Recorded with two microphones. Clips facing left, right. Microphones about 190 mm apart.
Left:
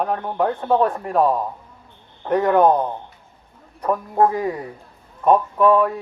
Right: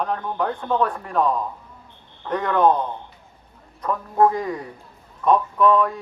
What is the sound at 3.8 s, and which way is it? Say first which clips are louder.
Speech: left 1 dB; 30° left (ahead or behind).